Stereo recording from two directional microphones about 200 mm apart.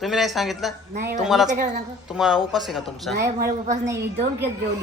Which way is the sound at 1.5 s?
40° right (ahead or behind).